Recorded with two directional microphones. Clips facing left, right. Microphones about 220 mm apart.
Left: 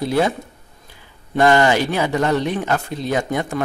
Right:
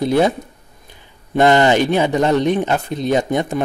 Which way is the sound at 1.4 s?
20° right (ahead or behind).